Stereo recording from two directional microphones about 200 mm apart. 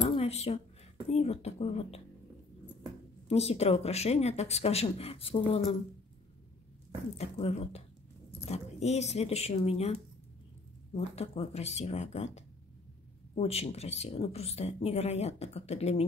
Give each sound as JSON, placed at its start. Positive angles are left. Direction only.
{"t": 0.0, "sound": "a sound", "side_deg": 30}
{"t": 1.0, "sound": "speech", "side_deg": 30}
{"t": 3.3, "sound": "speech", "side_deg": 30}
{"t": 7.2, "sound": "speech", "side_deg": 30}
{"t": 11.0, "sound": "speech", "side_deg": 30}
{"t": 13.3, "sound": "speech", "side_deg": 30}